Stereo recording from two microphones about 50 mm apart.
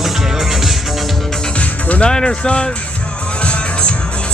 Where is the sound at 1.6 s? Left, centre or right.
Left.